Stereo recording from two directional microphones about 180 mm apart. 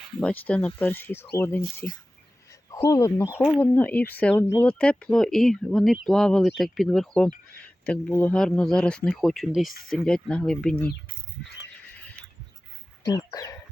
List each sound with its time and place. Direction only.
0.2 s speech: 5° left (ahead or behind)
3.2 s speech: 5° right (ahead or behind)
3.6 s speech: 10° left (ahead or behind)
13.0 s speech: 20° left (ahead or behind)